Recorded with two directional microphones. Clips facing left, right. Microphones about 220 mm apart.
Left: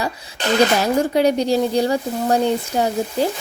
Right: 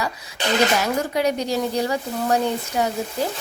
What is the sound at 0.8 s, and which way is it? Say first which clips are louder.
Speech: left 5 dB; 30° left (ahead or behind).